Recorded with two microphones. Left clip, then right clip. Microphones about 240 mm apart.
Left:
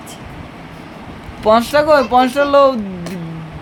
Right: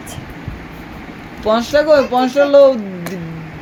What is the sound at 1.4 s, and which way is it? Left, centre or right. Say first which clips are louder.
A man's voice: left 2 dB; left.